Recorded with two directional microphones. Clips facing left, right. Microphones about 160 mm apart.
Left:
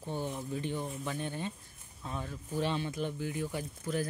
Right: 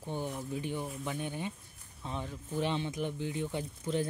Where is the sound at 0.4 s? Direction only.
10° right (ahead or behind).